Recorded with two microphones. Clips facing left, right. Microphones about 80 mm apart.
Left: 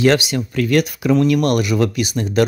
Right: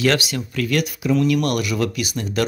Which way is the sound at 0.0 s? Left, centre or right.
Left.